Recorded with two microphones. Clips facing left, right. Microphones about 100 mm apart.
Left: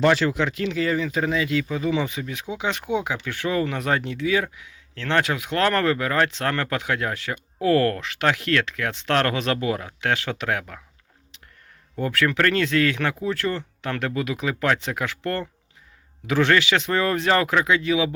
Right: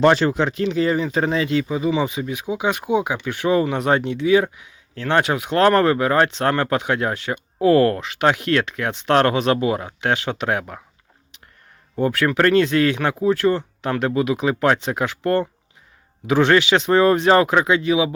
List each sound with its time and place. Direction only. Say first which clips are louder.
0.1 s speech: right 3 dB; 30° right (ahead or behind)
11.9 s speech: right 4 dB; 20° right (ahead or behind)